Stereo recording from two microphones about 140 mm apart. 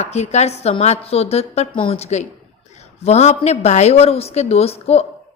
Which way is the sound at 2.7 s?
50° left (ahead or behind).